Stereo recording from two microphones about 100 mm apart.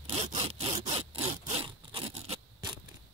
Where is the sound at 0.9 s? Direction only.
90° right.